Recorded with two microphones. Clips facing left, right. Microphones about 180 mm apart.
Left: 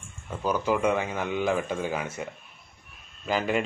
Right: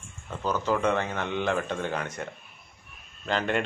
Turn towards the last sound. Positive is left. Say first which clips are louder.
# left 1 dB
turn(degrees=5)  # may be behind; listen again after turning